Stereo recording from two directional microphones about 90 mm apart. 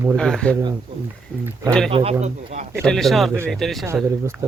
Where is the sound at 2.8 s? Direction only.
5° left (ahead or behind).